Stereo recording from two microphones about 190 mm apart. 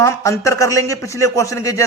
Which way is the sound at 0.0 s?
15° left (ahead or behind).